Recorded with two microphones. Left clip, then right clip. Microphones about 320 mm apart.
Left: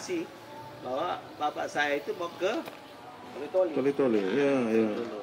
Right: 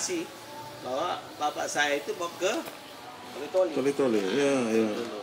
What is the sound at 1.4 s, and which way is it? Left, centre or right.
Speech, centre.